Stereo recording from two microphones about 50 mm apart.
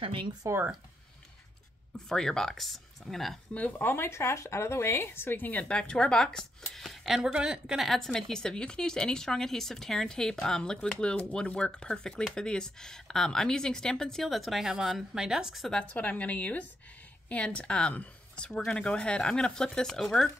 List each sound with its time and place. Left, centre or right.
0.4 s speech: right
2.0 s speech: centre
3.7 s speech: left
5.7 s speech: centre
7.2 s a woman's voice: centre
8.1 s speech: centre
15.8 s a woman's voice: left; by 20.2 s centre